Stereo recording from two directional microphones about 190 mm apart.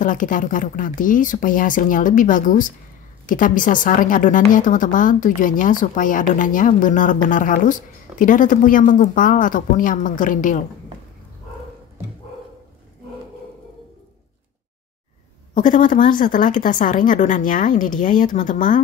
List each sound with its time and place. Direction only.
0.0 s a woman's voice: 45° left (ahead or behind)
15.5 s a woman's voice: 45° left (ahead or behind)